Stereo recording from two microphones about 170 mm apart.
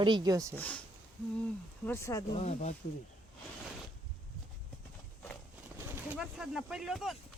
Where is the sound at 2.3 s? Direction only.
40° left (ahead or behind).